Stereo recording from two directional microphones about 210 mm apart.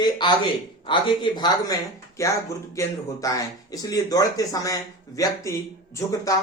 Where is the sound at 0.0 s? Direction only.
20° left (ahead or behind).